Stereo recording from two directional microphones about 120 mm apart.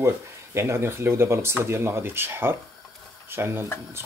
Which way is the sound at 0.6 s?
20° right (ahead or behind).